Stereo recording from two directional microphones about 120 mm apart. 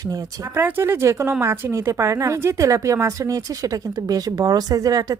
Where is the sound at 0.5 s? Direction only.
20° right (ahead or behind).